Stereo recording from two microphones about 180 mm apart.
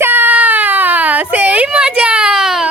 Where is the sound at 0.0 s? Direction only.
10° right (ahead or behind).